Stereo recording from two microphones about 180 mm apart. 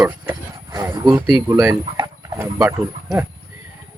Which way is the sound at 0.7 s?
20° right (ahead or behind).